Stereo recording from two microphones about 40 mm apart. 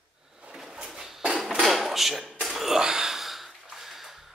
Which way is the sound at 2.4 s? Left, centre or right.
Centre.